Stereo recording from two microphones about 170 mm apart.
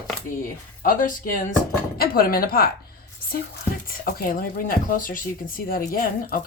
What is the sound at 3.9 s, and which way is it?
Speech, 60° left (ahead or behind).